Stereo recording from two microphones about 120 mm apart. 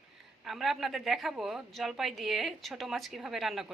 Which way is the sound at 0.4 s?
Centre (ahead or behind).